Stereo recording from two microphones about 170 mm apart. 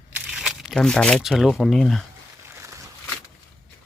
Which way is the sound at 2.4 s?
15° right (ahead or behind).